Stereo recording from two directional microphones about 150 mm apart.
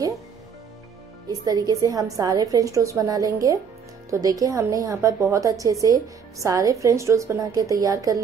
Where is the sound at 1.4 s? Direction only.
25° right (ahead or behind).